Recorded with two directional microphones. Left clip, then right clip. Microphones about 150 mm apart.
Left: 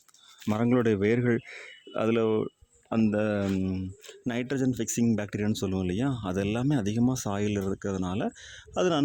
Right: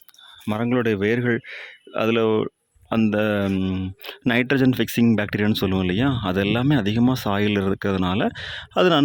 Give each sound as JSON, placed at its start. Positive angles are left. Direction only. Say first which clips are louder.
{"t": 0.4, "sound": "speech", "louder": "right 3 dB", "side_deg": -10}